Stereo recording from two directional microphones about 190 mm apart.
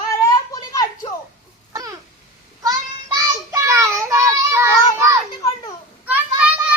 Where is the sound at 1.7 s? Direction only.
20° right (ahead or behind).